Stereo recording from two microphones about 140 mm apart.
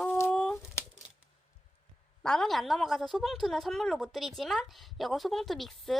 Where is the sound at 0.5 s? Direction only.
20° left (ahead or behind).